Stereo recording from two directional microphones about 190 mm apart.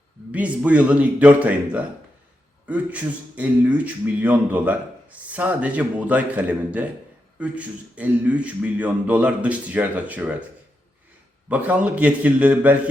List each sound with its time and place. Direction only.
0.3 s a man's voice: 5° right (ahead or behind)
11.4 s a man's voice: 5° right (ahead or behind)